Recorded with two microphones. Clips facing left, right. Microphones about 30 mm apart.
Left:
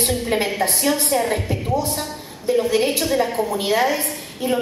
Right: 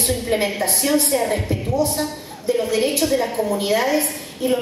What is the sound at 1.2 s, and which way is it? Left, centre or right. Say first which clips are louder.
A woman's voice: right 1 dB; centre.